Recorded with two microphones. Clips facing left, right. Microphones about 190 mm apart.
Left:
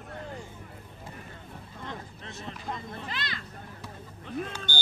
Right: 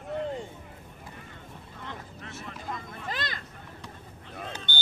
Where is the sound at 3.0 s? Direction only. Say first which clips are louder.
Right 2 dB; 45° right (ahead or behind).